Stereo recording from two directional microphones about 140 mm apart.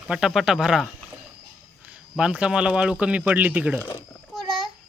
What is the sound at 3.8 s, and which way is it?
Speech, 20° left (ahead or behind).